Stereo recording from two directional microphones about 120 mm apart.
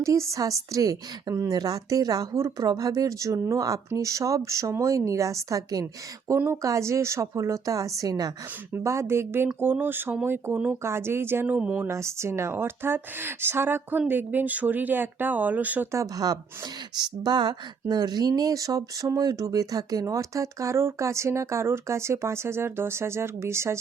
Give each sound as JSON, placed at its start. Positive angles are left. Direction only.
{"t": 0.0, "sound": "speech", "side_deg": -25}
{"t": 11.9, "sound": "speech", "side_deg": -25}
{"t": 15.9, "sound": "speech", "side_deg": -30}